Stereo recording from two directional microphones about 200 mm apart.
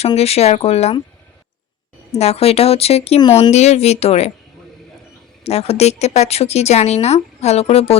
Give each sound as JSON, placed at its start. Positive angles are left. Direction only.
{"t": 0.0, "sound": "a woman's voice", "side_deg": 30}
{"t": 2.1, "sound": "a woman's voice", "side_deg": 30}
{"t": 5.4, "sound": "a woman's voice", "side_deg": 30}